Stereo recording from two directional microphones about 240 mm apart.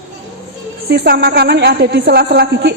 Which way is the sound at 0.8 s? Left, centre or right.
Right.